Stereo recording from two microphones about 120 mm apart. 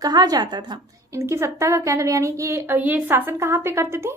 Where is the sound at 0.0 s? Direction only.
35° right (ahead or behind).